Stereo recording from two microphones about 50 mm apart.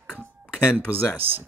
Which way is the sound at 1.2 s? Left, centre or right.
Right.